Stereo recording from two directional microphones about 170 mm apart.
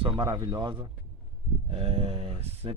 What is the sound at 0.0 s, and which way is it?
Speech, 25° right (ahead or behind).